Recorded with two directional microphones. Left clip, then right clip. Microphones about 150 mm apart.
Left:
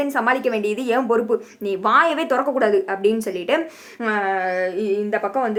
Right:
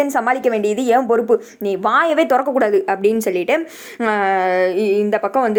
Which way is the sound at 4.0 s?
65° right (ahead or behind).